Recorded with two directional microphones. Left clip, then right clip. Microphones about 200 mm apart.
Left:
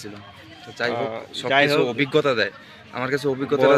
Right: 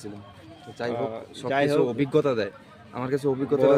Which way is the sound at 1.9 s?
15° right (ahead or behind).